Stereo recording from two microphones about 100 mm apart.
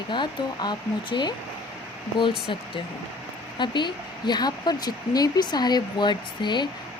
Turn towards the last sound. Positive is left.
turn(degrees=50)  # may be behind; listen again after turning